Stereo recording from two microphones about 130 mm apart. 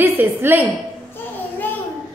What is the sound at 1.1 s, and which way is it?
Child singing, 15° left (ahead or behind).